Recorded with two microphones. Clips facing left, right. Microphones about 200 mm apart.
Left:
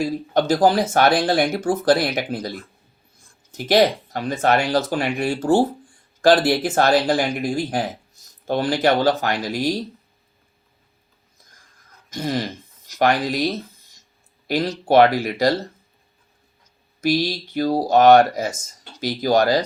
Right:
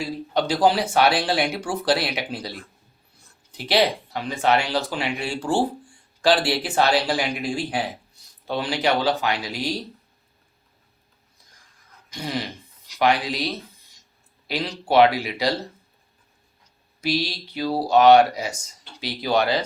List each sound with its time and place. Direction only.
0.0 s speech: 45° left (ahead or behind)
12.1 s speech: 45° left (ahead or behind)
17.0 s speech: 45° left (ahead or behind)